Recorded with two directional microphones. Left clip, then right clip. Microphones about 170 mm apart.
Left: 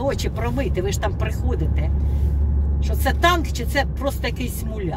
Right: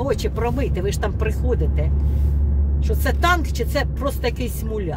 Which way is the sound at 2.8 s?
20° right (ahead or behind).